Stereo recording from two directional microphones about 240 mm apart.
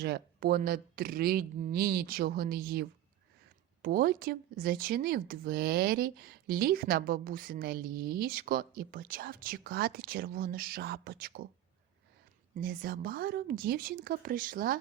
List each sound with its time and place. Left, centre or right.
0.0 s speech: right
12.5 s speech: right